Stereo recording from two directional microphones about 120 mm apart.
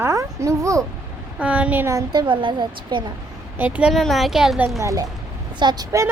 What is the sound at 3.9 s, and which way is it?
Speech, centre (ahead or behind).